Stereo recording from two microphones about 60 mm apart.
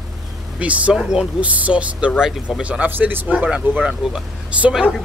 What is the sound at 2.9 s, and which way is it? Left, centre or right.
Speech, right.